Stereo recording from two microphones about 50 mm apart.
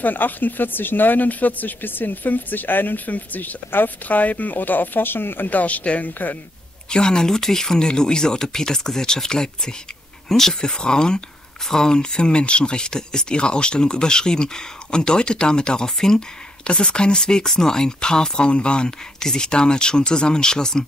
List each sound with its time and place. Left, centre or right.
0.0 s speech: left
5.5 s speech: left
6.9 s speech: centre